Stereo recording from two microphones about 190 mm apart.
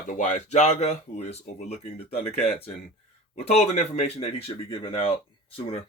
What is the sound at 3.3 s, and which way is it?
Speech, 35° left (ahead or behind).